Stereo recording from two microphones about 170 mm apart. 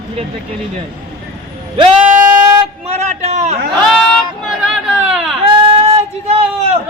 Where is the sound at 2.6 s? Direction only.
40° right (ahead or behind).